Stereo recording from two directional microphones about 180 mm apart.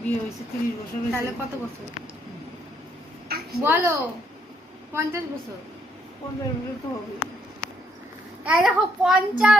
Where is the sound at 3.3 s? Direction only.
60° right (ahead or behind).